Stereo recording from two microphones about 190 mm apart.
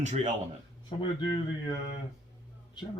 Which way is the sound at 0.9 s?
25° left (ahead or behind).